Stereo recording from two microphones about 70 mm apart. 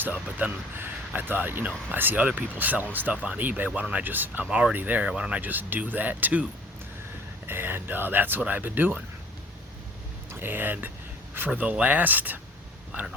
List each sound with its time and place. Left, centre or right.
0.3 s speech: right
5.4 s speech: right
10.4 s speech: right